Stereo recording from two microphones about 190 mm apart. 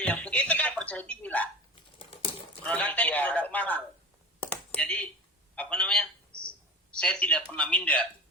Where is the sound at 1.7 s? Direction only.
30° left (ahead or behind).